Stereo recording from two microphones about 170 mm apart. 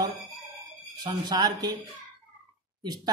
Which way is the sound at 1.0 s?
25° right (ahead or behind).